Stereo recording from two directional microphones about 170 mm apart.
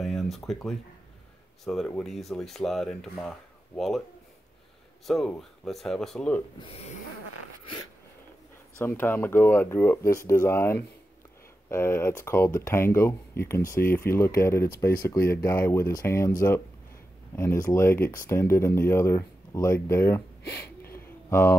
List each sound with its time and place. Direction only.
0.0 s speech: centre (ahead or behind)
5.0 s speech: centre (ahead or behind)
8.7 s speech: 15° left (ahead or behind)
20.9 s a sound: 15° left (ahead or behind)